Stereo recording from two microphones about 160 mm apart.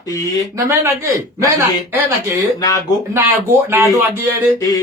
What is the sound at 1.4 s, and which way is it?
Speech, 15° right (ahead or behind).